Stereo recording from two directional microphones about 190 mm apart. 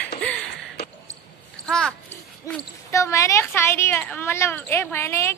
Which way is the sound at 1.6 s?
5° left (ahead or behind).